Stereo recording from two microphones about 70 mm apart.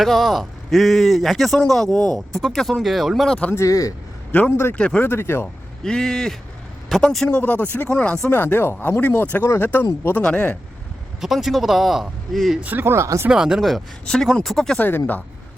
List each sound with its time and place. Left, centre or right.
0.0 s speech: centre
3.5 s speech: left
4.3 s a man's voice: left
5.0 s speech: left
5.8 s a man's voice: centre
7.3 s speech: centre
8.3 s speech: left
10.2 s a man's voice: centre
11.2 s speech: centre
12.6 s speech: right
13.3 s speech: centre
14.0 s a man's voice: centre
14.8 s speech: left